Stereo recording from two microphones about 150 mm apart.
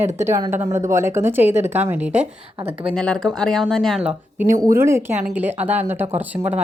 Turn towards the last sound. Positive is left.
turn(degrees=-15)  # may be behind; listen again after turning